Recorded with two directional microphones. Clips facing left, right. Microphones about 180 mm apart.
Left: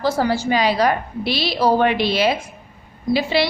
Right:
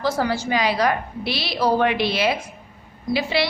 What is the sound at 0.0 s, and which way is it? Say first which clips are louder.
A woman's voice: left 3 dB; 30° left (ahead or behind).